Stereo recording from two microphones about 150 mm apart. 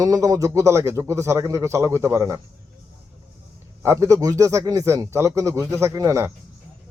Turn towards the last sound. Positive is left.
turn(degrees=-20)  # may be behind; listen again after turning